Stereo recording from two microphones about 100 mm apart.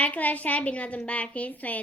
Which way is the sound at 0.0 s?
15° left (ahead or behind).